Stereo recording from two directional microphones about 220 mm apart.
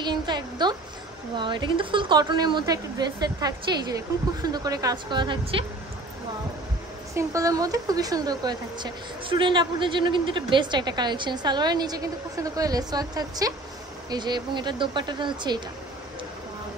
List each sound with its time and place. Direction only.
0.0 s a sound: 20° right (ahead or behind)
1.3 s a woman's voice: 20° right (ahead or behind)
7.2 s a woman's voice: 15° right (ahead or behind)